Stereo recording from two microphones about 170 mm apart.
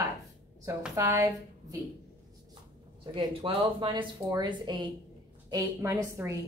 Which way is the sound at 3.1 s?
30° right (ahead or behind).